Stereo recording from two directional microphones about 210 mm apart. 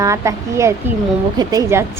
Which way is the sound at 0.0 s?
15° right (ahead or behind).